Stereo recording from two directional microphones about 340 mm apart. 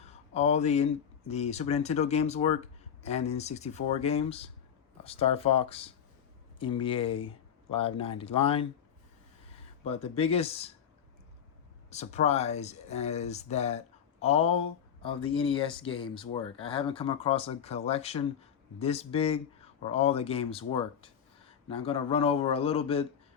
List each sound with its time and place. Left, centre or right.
0.0 s a sound: centre
1.3 s speech: centre
9.8 s speech: centre
11.9 s speech: centre